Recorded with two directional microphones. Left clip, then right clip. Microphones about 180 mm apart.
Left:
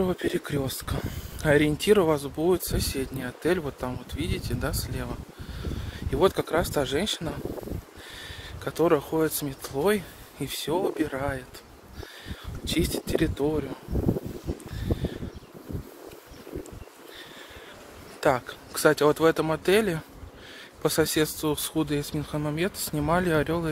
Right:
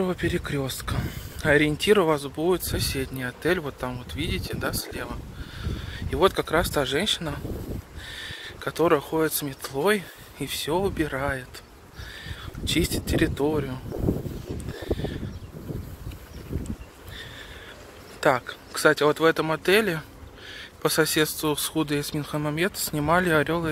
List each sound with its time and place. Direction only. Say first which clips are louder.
0.0 s speech: even; 10° left (ahead or behind); by 13.7 s 10° right (ahead or behind)
18.2 s speech: right 2 dB; 5° left (ahead or behind)
18.7 s speech: right 1 dB; 15° left (ahead or behind); by 23.7 s centre (ahead or behind)